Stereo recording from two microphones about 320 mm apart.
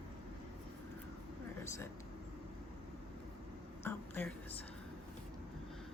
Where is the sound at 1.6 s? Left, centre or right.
Centre.